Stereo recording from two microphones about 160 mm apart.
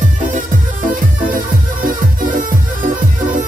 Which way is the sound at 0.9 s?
60° right (ahead or behind).